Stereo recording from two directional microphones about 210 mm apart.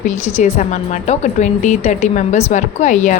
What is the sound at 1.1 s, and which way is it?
A woman's voice, 35° left (ahead or behind).